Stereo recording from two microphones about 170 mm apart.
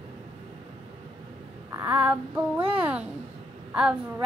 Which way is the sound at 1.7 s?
20° right (ahead or behind).